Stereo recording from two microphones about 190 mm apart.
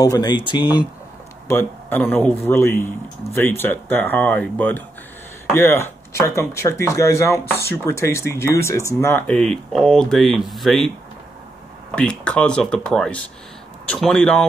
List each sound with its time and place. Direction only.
0.0 s speech: 20° left (ahead or behind)
1.5 s speech: 10° left (ahead or behind)
11.9 s speech: 5° left (ahead or behind)